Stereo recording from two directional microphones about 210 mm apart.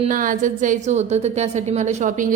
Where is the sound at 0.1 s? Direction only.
40° right (ahead or behind).